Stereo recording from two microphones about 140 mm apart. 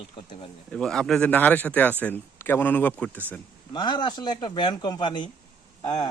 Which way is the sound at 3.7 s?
35° left (ahead or behind).